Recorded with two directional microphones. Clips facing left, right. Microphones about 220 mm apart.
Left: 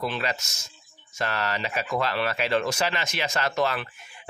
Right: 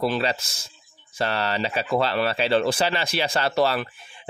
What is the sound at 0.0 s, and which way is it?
Speech, 35° right (ahead or behind).